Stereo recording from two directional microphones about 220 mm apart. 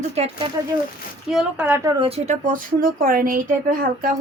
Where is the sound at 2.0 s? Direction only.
30° right (ahead or behind).